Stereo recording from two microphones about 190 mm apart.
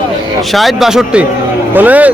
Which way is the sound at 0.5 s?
Centre (ahead or behind).